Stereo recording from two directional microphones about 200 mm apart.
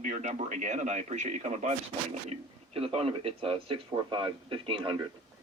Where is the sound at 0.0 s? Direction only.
40° right (ahead or behind).